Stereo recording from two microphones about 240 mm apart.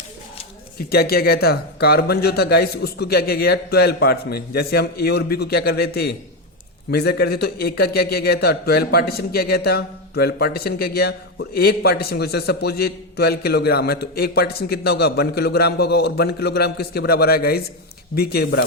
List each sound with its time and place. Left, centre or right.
0.8 s a man's voice: left